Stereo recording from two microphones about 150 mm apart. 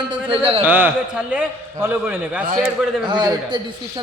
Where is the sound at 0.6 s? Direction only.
15° right (ahead or behind).